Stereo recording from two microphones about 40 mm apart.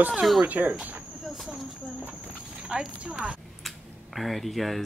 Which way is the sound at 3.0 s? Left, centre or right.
Right.